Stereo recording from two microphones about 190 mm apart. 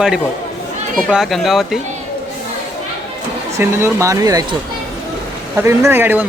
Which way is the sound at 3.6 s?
15° right (ahead or behind).